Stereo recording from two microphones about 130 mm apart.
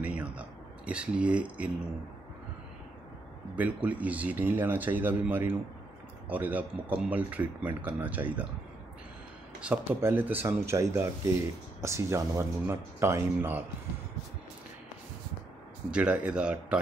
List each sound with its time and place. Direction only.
0.0 s a sound: 10° right (ahead or behind)
3.5 s speech: 10° right (ahead or behind)
9.6 s speech: 10° right (ahead or behind)
15.9 s speech: 10° right (ahead or behind)